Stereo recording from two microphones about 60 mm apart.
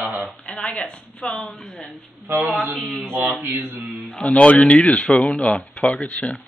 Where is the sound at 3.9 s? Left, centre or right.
Centre.